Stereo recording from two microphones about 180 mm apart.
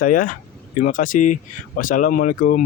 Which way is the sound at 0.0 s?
50° left (ahead or behind).